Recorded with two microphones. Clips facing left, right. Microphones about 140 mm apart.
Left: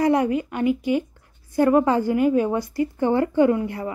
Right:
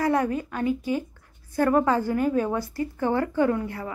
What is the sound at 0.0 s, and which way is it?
A woman's voice, 15° left (ahead or behind).